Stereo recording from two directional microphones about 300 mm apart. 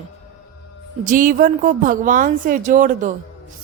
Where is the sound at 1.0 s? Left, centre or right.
Right.